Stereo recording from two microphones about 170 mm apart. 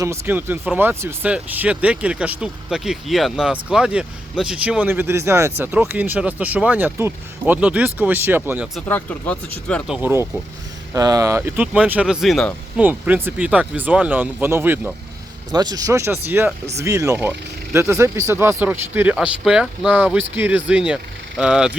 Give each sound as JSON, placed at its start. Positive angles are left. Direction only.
{"t": 0.0, "sound": "speech", "side_deg": -15}
{"t": 8.9, "sound": "speech", "side_deg": 10}
{"t": 9.9, "sound": "speech", "side_deg": -15}
{"t": 12.8, "sound": "speech", "side_deg": -10}
{"t": 15.5, "sound": "speech", "side_deg": -25}